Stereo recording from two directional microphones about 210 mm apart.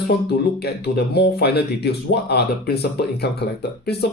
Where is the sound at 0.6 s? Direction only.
50° left (ahead or behind).